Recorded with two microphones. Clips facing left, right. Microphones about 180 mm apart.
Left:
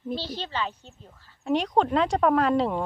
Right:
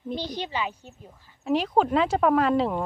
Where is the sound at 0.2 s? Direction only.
15° right (ahead or behind).